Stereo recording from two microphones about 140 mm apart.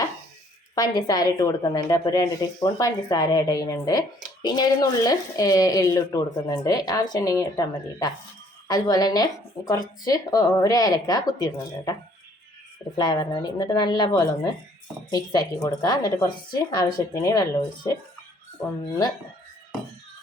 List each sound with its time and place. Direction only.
0.8 s a woman's voice: 30° left (ahead or behind)
13.0 s a woman's voice: 30° left (ahead or behind)